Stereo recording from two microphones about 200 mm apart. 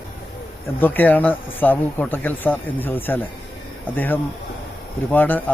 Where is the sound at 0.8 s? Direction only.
10° left (ahead or behind).